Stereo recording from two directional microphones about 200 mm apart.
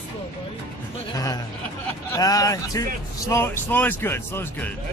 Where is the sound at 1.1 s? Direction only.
20° left (ahead or behind).